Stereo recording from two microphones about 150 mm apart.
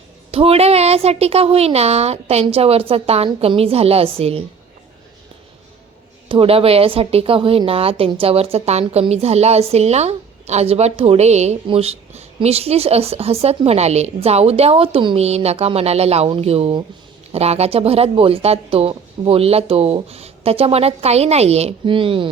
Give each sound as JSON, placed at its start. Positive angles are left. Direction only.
{"t": 0.3, "sound": "speech", "side_deg": -40}
{"t": 6.2, "sound": "speech", "side_deg": -35}